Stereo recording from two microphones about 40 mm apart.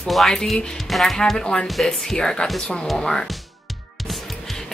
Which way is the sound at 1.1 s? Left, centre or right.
Centre.